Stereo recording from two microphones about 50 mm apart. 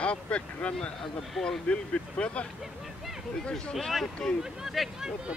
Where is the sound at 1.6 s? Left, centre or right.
Left.